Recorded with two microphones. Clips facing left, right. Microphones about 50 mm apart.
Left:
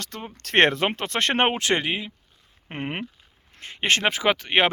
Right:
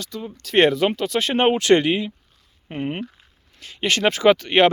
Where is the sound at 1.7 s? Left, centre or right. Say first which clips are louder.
Right 8 dB; centre.